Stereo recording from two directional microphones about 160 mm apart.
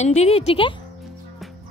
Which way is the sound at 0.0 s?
45° left (ahead or behind).